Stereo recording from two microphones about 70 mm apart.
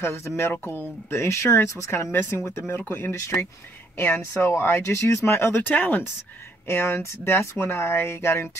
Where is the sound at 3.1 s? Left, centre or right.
Left.